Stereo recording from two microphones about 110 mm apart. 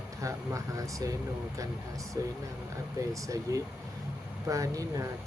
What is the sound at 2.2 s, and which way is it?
Speech, 30° right (ahead or behind).